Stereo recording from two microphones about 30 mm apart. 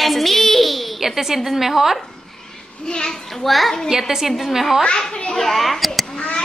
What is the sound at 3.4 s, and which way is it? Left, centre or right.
Speech, centre.